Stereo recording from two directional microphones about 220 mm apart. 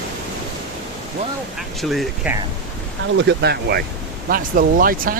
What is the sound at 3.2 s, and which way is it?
Speech, 50° right (ahead or behind).